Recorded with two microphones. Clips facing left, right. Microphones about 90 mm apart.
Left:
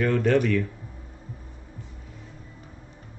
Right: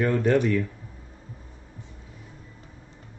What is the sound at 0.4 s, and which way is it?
Speech, 15° right (ahead or behind).